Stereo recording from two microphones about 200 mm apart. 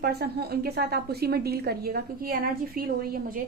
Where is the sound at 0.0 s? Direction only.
55° right (ahead or behind).